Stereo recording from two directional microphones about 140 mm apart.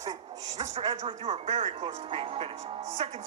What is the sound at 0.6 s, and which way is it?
Speech, 45° right (ahead or behind).